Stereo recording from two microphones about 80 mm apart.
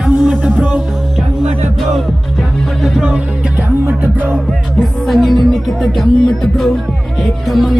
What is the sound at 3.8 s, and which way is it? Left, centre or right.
Music, right.